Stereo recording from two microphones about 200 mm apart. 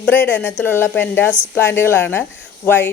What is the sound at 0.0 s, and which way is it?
Speech, 10° left (ahead or behind).